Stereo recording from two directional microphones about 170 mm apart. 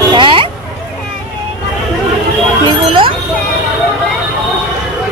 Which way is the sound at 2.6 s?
30° right (ahead or behind).